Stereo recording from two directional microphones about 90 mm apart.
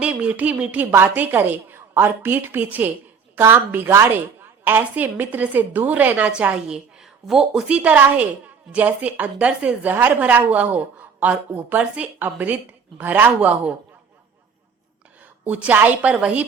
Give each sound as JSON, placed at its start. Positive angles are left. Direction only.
{"t": 0.0, "sound": "a woman's voice", "side_deg": -15}
{"t": 15.4, "sound": "a woman's voice", "side_deg": -15}